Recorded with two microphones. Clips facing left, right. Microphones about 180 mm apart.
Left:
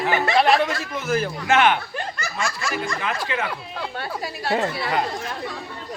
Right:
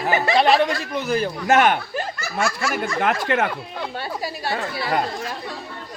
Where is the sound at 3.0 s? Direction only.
55° right (ahead or behind).